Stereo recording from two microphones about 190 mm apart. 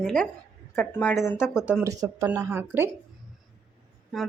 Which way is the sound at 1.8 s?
15° right (ahead or behind).